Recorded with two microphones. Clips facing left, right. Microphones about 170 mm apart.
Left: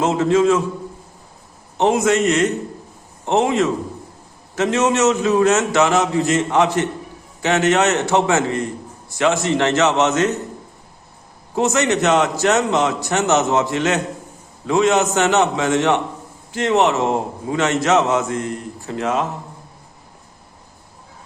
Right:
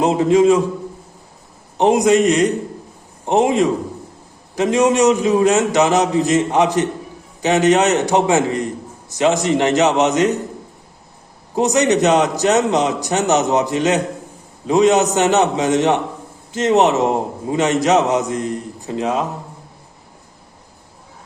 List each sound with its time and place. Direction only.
0.0 s a man's voice: 15° right (ahead or behind)
1.8 s a man's voice: 15° right (ahead or behind)
11.5 s a man's voice: 15° right (ahead or behind)